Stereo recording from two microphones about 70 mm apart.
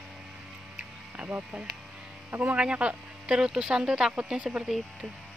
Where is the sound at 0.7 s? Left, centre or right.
Centre.